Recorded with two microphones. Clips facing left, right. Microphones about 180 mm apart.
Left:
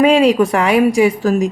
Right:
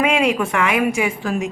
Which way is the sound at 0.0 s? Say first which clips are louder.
Left 7 dB; 35° left (ahead or behind).